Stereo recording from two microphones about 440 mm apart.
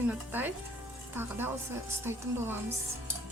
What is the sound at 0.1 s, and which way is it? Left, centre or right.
A woman's voice, centre.